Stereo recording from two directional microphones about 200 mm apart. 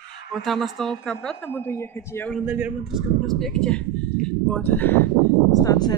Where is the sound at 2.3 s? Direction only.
10° right (ahead or behind).